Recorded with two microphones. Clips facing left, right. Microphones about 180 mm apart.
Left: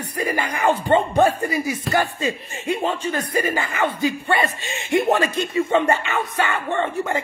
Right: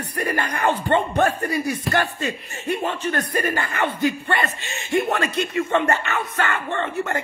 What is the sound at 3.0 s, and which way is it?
Speech, 10° left (ahead or behind).